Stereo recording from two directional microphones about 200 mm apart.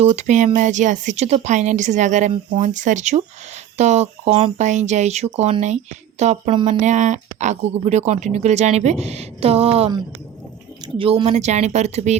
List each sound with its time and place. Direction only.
0.0 s speech: 35° right (ahead or behind)